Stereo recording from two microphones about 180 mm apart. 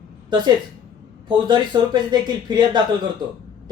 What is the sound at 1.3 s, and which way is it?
Speech, 25° right (ahead or behind).